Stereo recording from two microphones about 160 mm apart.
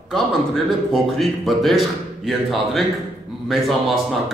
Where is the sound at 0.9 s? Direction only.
Centre (ahead or behind).